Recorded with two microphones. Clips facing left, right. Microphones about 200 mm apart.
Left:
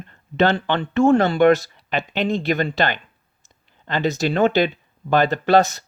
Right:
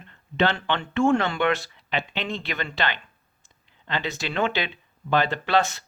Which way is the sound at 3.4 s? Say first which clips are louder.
Left 6 dB; 45° left (ahead or behind).